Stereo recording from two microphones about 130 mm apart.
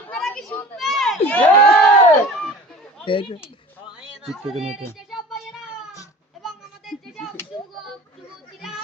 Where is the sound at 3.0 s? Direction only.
40° left (ahead or behind).